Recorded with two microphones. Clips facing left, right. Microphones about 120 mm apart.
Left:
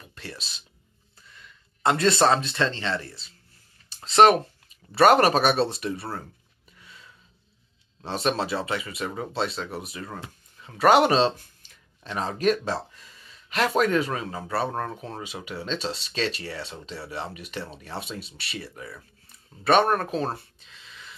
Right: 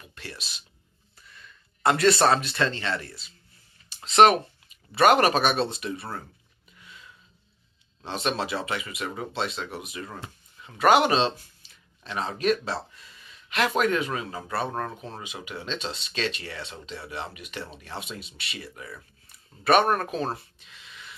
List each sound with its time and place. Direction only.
0.0 s speech: 35° left (ahead or behind)
4.3 s speech: 35° left (ahead or behind)
6.8 s a sound: 35° left (ahead or behind)
8.0 s speech: 35° left (ahead or behind)